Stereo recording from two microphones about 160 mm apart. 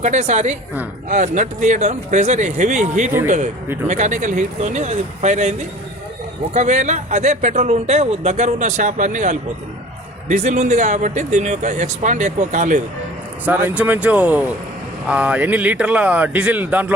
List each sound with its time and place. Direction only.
0.0 s speech: 45° right (ahead or behind)
13.4 s a man's voice: 10° right (ahead or behind)